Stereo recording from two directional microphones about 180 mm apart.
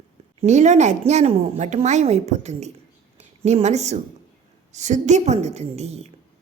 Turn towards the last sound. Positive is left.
turn(degrees=-35)  # may be behind; listen again after turning